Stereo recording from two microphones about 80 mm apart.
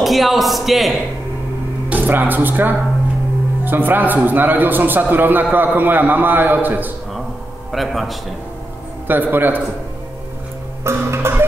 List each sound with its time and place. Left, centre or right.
0.0 s a man's voice: centre
1.9 s a man's voice: right
7.7 s a man's voice: centre
9.0 s a man's voice: right
10.8 s music: right